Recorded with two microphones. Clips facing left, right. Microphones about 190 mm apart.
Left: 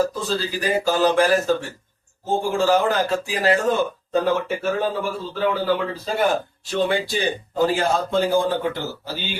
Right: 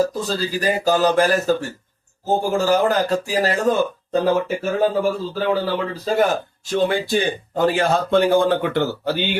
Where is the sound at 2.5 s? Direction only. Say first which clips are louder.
Even; 40° right (ahead or behind).